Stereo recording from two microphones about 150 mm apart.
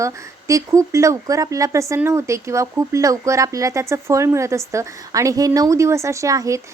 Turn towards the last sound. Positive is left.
turn(degrees=-20)  # may be behind; listen again after turning